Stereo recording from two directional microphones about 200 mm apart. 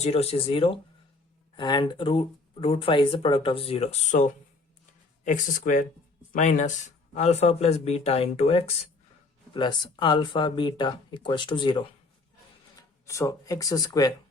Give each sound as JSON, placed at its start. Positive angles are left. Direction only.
{"t": 0.0, "sound": "speech", "side_deg": 30}
{"t": 4.1, "sound": "speech", "side_deg": 40}
{"t": 13.1, "sound": "speech", "side_deg": 15}